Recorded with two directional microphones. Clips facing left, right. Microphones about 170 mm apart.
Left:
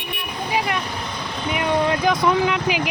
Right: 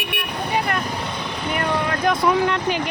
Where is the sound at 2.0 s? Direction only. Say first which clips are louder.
Even; centre (ahead or behind).